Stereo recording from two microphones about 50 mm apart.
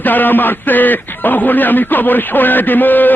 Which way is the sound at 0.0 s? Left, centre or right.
Left.